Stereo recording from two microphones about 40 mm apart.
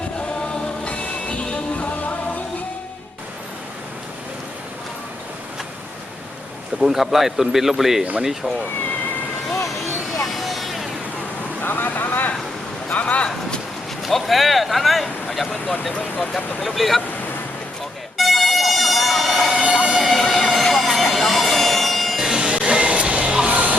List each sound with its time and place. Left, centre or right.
6.8 s speech: centre
10.4 s vehicle: centre
11.6 s vehicle: left
12.9 s a sound: left
14.0 s speech: centre
18.2 s emergency vehicle: centre
19.6 s fire engine: centre
20.0 s vehicle: centre
22.2 s a sound: centre
22.4 s music: right